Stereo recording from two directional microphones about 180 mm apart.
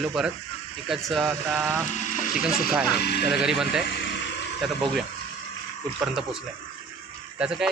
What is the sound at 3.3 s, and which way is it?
Speech, 5° right (ahead or behind).